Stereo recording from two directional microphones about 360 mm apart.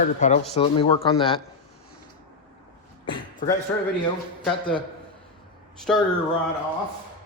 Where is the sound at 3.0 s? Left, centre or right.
Centre.